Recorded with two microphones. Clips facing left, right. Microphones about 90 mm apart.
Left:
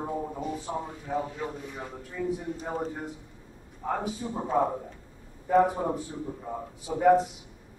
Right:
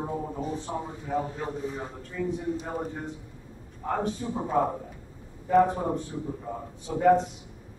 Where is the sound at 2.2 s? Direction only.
5° left (ahead or behind).